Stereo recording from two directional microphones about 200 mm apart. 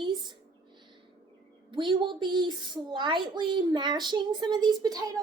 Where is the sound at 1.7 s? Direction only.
25° right (ahead or behind).